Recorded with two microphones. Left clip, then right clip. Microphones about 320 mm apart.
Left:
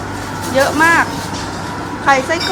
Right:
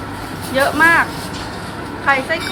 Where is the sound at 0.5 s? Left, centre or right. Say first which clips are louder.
Left 1 dB; centre.